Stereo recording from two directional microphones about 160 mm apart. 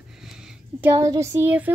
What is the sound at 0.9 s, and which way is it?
Speech, 20° right (ahead or behind).